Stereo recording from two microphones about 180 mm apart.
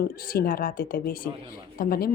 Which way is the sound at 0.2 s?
55° left (ahead or behind).